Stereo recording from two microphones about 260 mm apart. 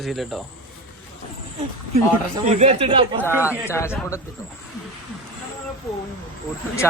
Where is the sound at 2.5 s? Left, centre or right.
Right.